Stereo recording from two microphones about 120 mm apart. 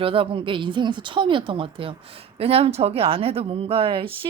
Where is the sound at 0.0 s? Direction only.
50° right (ahead or behind).